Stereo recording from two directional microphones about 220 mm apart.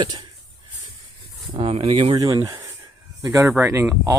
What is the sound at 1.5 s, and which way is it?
Speech, 25° right (ahead or behind).